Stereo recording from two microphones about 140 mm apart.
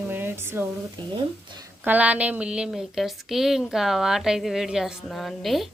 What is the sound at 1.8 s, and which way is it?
Speech, 10° right (ahead or behind).